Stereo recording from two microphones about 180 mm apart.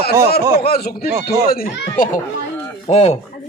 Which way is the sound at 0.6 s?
55° left (ahead or behind).